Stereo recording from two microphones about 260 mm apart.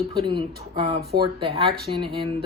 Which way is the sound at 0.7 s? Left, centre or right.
Centre.